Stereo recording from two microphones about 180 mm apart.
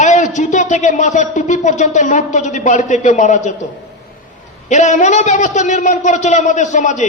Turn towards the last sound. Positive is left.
turn(degrees=40)  # may be behind; listen again after turning